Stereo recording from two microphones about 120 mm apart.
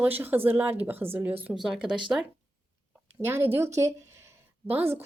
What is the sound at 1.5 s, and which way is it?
Speech, 5° right (ahead or behind).